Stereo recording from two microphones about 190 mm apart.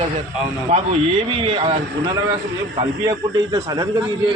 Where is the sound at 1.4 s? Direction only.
30° right (ahead or behind).